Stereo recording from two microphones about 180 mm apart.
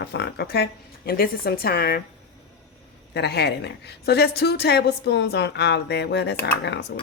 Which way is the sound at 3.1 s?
65° left (ahead or behind).